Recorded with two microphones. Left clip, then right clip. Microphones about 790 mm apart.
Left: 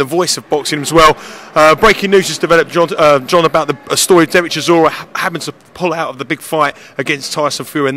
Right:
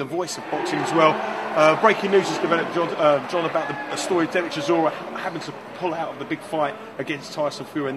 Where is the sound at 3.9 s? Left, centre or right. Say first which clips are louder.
Left 14 dB; left.